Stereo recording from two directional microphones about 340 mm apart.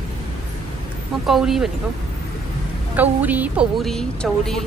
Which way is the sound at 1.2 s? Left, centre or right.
Centre.